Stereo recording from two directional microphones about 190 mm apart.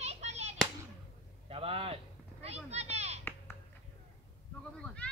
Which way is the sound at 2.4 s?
35° right (ahead or behind).